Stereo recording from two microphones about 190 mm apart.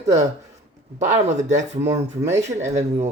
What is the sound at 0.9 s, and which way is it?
Speech, 40° right (ahead or behind).